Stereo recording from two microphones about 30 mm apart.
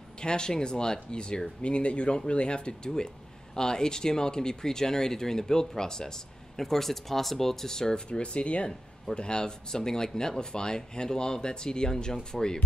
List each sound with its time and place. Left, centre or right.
0.2 s speech: left
6.6 s speech: centre
7.9 s speech: left